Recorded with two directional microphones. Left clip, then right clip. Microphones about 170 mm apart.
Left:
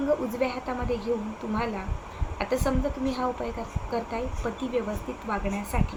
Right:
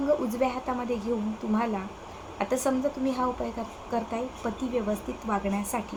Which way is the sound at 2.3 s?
15° right (ahead or behind).